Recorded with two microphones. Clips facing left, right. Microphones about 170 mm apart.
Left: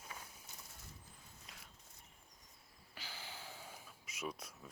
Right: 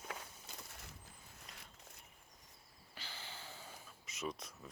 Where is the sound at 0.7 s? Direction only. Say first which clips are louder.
Right 3 dB; 80° right.